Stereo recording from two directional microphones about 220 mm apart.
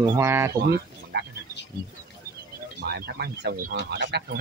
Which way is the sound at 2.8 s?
45° right (ahead or behind).